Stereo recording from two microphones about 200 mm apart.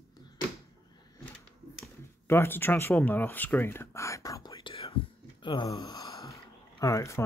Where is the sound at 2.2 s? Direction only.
10° left (ahead or behind).